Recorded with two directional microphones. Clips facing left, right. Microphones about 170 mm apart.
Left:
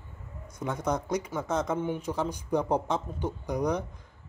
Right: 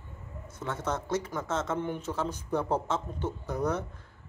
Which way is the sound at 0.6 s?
15° left (ahead or behind).